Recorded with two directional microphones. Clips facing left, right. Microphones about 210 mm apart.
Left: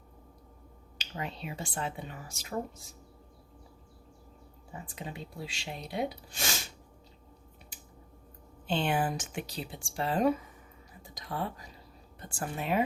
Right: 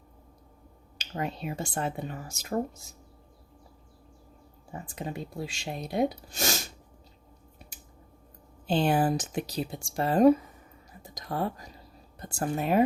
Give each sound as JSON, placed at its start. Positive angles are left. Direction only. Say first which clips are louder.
{"t": 0.9, "sound": "speech", "louder": "right 6 dB", "side_deg": -45}
{"t": 4.7, "sound": "speech", "louder": "right 6 dB", "side_deg": -45}
{"t": 8.6, "sound": "speech", "louder": "right 5 dB", "side_deg": -40}